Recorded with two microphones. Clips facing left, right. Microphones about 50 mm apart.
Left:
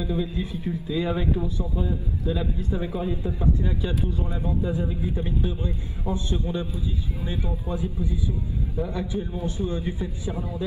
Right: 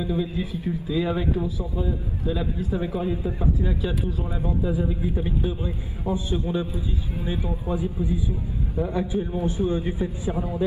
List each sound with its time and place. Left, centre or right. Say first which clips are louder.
0.0 s a man's voice: right 1 dB; centre